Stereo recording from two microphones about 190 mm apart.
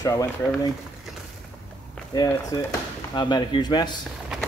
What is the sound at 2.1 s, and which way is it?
Speech, 20° left (ahead or behind).